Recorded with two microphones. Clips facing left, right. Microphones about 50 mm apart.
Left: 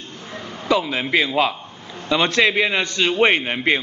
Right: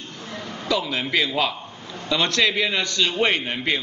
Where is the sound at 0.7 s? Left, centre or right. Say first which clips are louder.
Left 4 dB; left.